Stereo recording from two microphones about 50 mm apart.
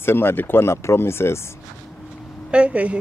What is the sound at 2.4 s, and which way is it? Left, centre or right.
Speech, right.